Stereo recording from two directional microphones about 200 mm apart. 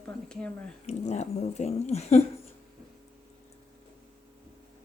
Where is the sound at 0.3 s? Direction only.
5° left (ahead or behind).